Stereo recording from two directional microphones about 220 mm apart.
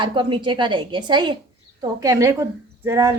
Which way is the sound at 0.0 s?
20° right (ahead or behind).